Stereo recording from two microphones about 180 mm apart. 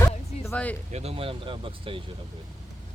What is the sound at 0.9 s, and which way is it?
Speech, 35° right (ahead or behind).